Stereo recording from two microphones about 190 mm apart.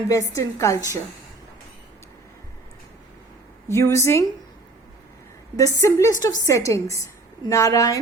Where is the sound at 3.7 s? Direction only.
15° left (ahead or behind).